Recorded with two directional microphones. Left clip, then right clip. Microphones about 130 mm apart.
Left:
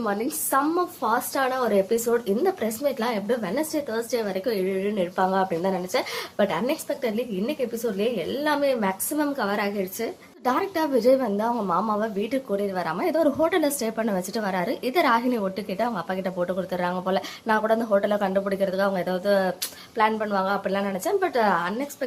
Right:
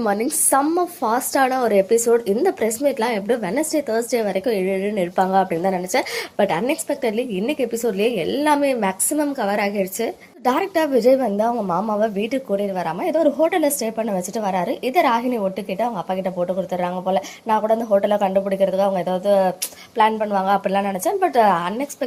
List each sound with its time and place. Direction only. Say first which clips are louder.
0.0 s a woman's voice: right 6 dB; 25° right (ahead or behind)